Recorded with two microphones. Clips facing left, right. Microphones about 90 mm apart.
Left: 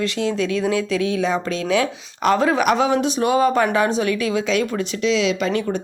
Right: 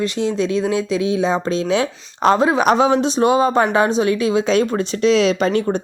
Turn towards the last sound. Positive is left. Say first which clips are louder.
# right 4 dB
turn(degrees=-35)  # may be behind; listen again after turning